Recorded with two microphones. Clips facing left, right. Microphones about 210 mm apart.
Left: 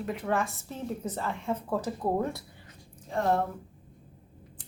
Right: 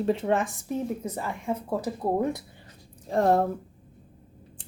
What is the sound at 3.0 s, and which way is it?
Speech, 40° right (ahead or behind).